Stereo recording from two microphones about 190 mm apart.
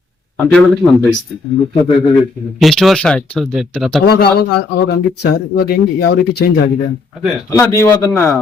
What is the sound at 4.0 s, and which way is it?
Speech, 55° left (ahead or behind).